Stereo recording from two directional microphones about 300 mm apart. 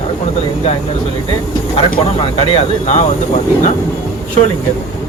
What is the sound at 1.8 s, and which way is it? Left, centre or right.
Speech, centre.